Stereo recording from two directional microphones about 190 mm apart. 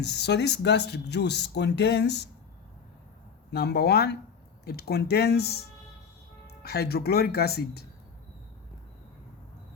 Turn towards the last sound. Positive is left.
turn(degrees=55)  # may be behind; listen again after turning